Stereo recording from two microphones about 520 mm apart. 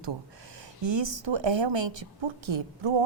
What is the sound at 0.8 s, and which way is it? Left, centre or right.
A woman's voice, right.